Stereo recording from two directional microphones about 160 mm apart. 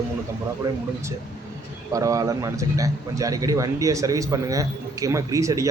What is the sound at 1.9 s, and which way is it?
Speech, 20° right (ahead or behind).